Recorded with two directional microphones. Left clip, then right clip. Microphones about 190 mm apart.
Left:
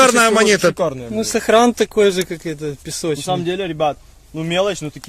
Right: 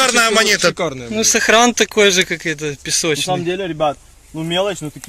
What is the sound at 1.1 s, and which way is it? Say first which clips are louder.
Speech: right 3 dB; 10° left (ahead or behind).